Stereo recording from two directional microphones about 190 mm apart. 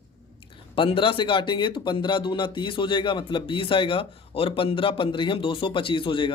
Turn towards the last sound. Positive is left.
turn(degrees=25)  # may be behind; listen again after turning